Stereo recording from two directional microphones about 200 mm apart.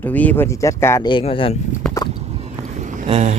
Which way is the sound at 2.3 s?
30° right (ahead or behind).